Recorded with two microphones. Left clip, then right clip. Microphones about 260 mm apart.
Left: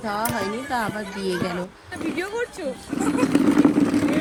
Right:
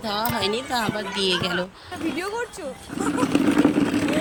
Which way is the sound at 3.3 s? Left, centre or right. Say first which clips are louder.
Left 1 dB; centre.